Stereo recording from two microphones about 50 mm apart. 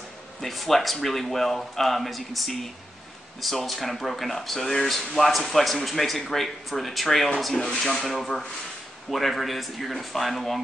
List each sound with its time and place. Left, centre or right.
0.4 s speech: centre
8.1 s speech: centre